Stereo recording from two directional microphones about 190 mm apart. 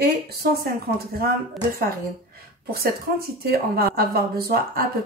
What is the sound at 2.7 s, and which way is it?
Speech, 55° right (ahead or behind).